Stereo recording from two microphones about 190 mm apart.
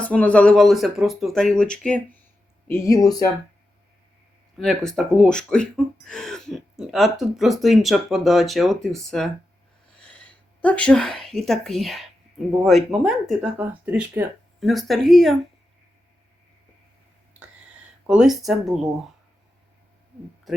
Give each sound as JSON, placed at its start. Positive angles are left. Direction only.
{"t": 0.0, "sound": "speech", "side_deg": 5}
{"t": 2.6, "sound": "speech", "side_deg": 15}
{"t": 4.5, "sound": "speech", "side_deg": 0}
{"t": 10.1, "sound": "a sound", "side_deg": 5}
{"t": 11.2, "sound": "speech", "side_deg": 0}
{"t": 18.0, "sound": "speech", "side_deg": -5}